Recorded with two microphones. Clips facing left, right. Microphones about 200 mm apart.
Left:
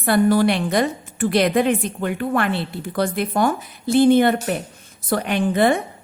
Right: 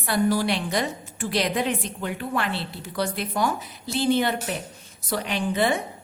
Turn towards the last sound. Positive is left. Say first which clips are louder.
# left 6 dB
turn(degrees=55)  # may be behind; listen again after turning